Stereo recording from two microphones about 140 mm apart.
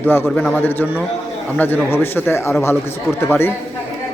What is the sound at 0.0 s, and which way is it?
A man's voice, 15° left (ahead or behind).